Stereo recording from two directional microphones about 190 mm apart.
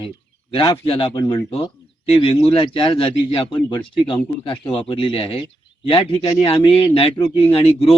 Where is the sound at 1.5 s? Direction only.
30° left (ahead or behind).